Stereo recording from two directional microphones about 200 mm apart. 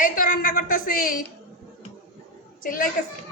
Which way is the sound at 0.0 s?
40° left (ahead or behind).